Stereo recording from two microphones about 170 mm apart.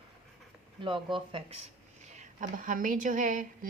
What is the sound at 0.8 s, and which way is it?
Speech, 30° right (ahead or behind).